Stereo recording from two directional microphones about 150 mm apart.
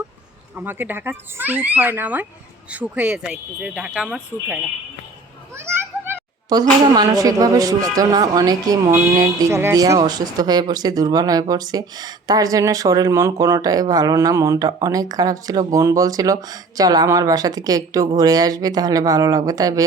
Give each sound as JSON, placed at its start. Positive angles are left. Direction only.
{"t": 0.5, "sound": "speech", "side_deg": -10}
{"t": 5.5, "sound": "children playing", "side_deg": -15}
{"t": 6.5, "sound": "speech", "side_deg": -25}